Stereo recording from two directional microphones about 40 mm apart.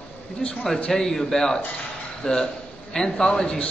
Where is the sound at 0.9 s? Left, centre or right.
Centre.